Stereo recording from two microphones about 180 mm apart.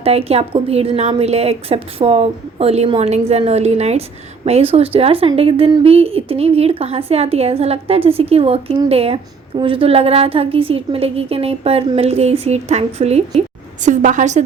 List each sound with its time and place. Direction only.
0.0 s a woman's voice: 35° right (ahead or behind)